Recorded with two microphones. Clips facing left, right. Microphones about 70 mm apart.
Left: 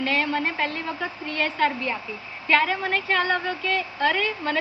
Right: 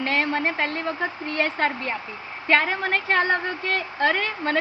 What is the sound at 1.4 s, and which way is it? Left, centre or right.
A woman's voice, right.